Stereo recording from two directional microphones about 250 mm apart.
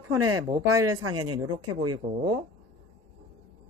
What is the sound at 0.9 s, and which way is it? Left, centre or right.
Speech, right.